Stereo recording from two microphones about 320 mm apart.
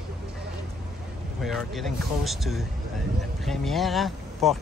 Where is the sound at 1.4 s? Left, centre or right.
Centre.